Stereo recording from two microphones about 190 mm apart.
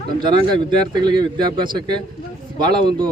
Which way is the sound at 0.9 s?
25° right (ahead or behind).